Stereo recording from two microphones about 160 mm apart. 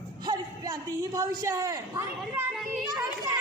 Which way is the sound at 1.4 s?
25° right (ahead or behind).